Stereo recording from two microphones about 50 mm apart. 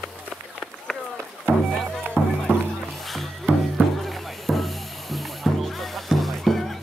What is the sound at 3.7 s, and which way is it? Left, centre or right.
Music, centre.